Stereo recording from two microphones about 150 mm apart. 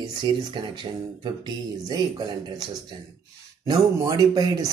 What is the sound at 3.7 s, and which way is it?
Speech, 25° right (ahead or behind).